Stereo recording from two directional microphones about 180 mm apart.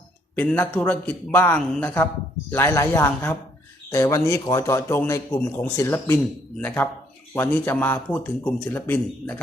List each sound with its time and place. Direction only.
0.3 s a man's voice: 10° left (ahead or behind)